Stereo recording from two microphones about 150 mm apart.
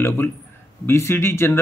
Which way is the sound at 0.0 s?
15° left (ahead or behind).